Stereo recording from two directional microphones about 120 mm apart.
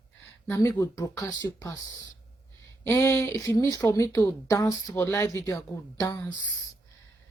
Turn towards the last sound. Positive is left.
turn(degrees=30)  # may be behind; listen again after turning